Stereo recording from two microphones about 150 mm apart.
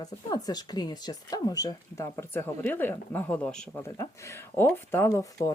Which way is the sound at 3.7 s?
20° left (ahead or behind).